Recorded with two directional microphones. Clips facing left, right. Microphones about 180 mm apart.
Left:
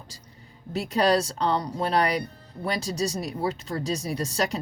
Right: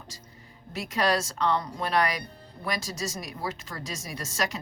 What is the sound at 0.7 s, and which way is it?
Speech, 35° left (ahead or behind).